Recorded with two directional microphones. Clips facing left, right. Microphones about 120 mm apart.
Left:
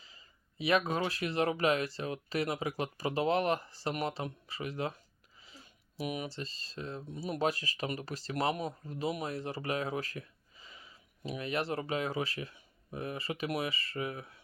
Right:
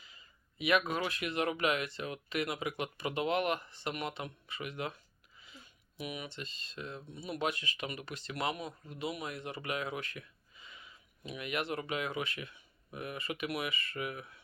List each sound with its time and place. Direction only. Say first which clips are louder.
0.0 s speech: even; 30° left (ahead or behind)